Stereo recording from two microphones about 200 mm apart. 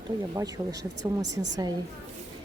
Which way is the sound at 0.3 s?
15° right (ahead or behind).